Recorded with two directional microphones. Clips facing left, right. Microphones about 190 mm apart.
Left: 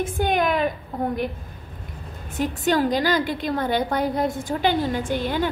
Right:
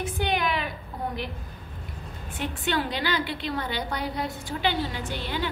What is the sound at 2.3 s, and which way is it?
A woman's voice, 40° left (ahead or behind).